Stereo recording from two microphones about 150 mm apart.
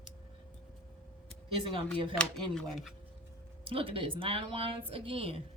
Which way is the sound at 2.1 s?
5° left (ahead or behind).